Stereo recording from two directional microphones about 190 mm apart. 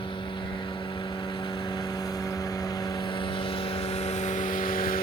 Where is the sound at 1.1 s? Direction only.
25° left (ahead or behind).